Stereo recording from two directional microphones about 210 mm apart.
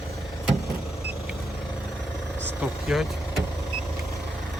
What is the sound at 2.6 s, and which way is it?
Speech, centre (ahead or behind).